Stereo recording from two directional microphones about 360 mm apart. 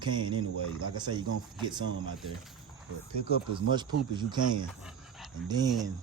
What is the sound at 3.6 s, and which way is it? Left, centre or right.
Speech, centre.